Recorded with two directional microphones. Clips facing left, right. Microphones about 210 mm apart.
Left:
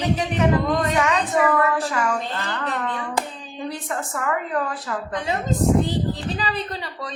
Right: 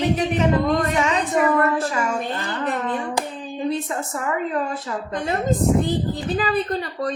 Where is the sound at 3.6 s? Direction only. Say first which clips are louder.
Right 4 dB; 25° right (ahead or behind).